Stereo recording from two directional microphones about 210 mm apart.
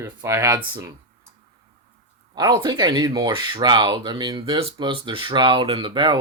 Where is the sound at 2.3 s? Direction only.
20° right (ahead or behind).